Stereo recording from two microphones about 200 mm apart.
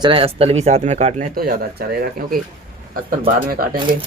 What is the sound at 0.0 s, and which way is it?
A man's voice, 25° right (ahead or behind).